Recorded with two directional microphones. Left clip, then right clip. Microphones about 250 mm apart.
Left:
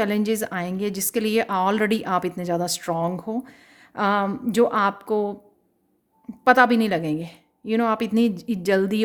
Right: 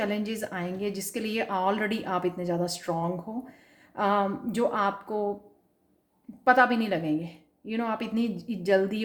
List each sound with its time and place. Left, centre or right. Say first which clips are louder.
0.0 s a woman's voice: left 7 dB; left
6.4 s a woman's voice: left 5 dB; left